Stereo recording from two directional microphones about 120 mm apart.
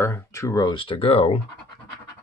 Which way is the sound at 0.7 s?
50° left (ahead or behind).